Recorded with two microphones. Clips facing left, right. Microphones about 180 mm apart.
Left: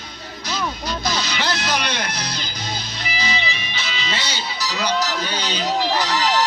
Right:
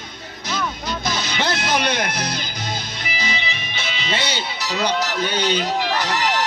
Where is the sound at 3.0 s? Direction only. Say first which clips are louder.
Left 4 dB; 50° right (ahead or behind).